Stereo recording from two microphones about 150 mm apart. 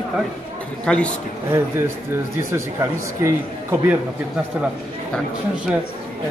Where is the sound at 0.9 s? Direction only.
5° left (ahead or behind).